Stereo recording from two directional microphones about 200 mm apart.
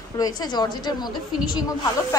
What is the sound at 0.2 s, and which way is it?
A woman's voice, 20° left (ahead or behind).